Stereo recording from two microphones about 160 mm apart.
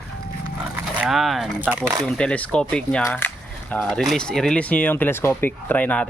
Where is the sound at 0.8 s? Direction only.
5° right (ahead or behind).